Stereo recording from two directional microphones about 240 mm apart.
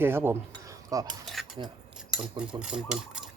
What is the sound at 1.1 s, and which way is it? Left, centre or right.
Speech, centre.